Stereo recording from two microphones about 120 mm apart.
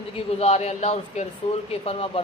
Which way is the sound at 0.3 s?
60° left (ahead or behind).